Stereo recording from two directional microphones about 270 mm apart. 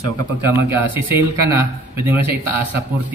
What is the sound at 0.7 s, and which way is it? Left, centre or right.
Speech, centre.